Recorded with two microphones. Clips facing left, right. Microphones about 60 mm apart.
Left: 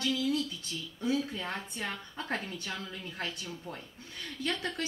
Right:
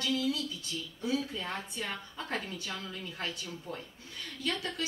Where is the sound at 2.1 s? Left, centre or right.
Left.